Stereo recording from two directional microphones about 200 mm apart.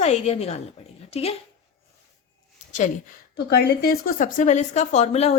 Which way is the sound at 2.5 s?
40° left (ahead or behind).